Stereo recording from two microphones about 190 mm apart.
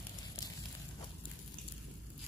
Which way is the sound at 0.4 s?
20° left (ahead or behind).